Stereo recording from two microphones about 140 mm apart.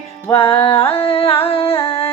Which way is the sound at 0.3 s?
40° left (ahead or behind).